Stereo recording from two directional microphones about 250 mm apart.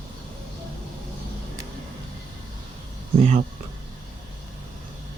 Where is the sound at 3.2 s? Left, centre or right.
Right.